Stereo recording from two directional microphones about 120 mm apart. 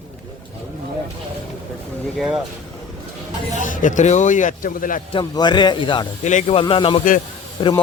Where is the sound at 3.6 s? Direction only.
90° left.